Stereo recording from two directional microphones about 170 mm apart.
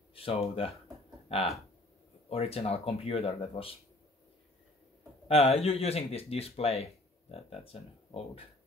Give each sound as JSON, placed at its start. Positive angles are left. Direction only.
{"t": 0.1, "sound": "speech", "side_deg": 35}
{"t": 5.3, "sound": "speech", "side_deg": 35}